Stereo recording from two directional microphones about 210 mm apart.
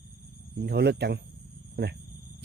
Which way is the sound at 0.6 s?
50° right (ahead or behind).